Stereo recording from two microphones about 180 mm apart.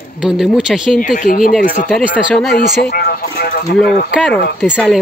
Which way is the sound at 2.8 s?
55° left (ahead or behind).